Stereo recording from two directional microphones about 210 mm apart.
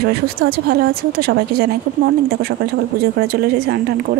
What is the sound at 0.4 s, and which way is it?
A woman's voice, 45° right (ahead or behind).